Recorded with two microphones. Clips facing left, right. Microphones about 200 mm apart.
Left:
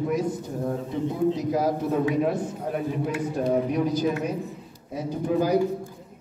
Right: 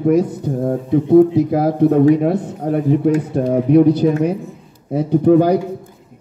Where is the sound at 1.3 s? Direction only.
60° right (ahead or behind).